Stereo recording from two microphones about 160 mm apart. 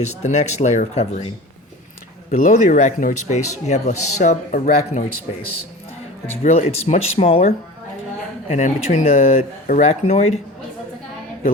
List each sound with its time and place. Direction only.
0.0 s speech: 45° left (ahead or behind)
2.3 s speech: 55° left (ahead or behind)
6.4 s speech: 45° left (ahead or behind)
8.5 s speech: 50° left (ahead or behind)